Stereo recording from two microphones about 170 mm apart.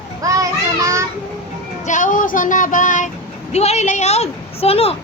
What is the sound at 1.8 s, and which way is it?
Child singing, 50° left (ahead or behind).